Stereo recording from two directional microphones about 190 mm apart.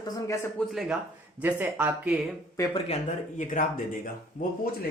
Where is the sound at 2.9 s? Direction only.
40° left (ahead or behind).